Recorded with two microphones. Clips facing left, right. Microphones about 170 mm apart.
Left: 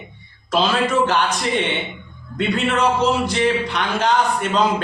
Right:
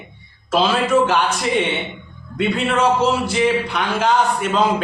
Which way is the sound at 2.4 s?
5° right (ahead or behind).